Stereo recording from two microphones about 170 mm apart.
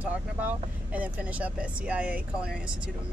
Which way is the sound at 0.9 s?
10° right (ahead or behind).